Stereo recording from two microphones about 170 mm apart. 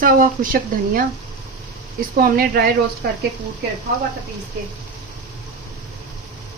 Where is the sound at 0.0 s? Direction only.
55° right (ahead or behind).